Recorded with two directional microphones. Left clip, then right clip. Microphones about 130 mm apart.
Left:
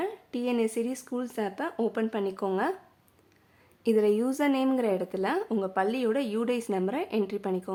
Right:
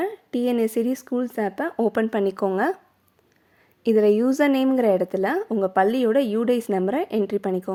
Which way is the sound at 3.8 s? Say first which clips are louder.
Right 6 dB; 35° right (ahead or behind).